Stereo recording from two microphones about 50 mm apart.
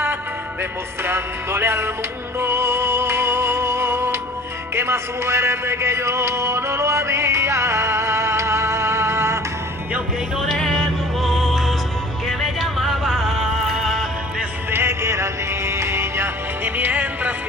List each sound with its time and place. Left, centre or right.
1.0 s music: right
10.3 s music: centre
14.7 s music: right
16.6 s music: right